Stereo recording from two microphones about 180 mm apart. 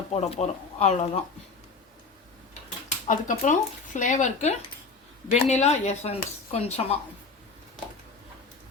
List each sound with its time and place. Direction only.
0.1 s speech: 35° left (ahead or behind)
2.6 s speech: 45° left (ahead or behind)